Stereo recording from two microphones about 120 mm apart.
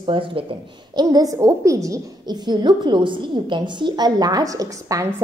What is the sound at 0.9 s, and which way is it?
A woman's voice, 30° right (ahead or behind).